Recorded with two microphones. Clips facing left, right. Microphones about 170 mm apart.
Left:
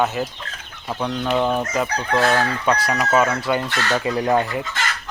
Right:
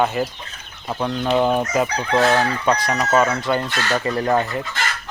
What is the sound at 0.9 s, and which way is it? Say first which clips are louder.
Chicken: right 2 dB; 5° right (ahead or behind).